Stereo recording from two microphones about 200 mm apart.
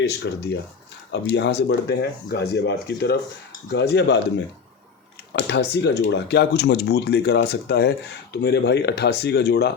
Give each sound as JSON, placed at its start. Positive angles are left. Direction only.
{"t": 0.2, "sound": "speech", "side_deg": 65}